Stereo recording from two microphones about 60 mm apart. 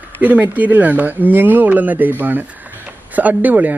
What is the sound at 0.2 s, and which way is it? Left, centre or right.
Speech, right.